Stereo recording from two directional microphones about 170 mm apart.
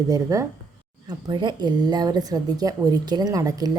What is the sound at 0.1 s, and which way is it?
Speech, 20° right (ahead or behind).